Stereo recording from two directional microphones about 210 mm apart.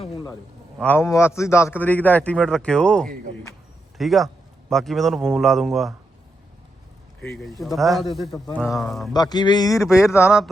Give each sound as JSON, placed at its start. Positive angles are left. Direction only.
{"t": 0.8, "sound": "a man's voice", "side_deg": 10}
{"t": 7.2, "sound": "a man's voice", "side_deg": 0}
{"t": 9.1, "sound": "a sound", "side_deg": 20}
{"t": 9.8, "sound": "a man's voice", "side_deg": -5}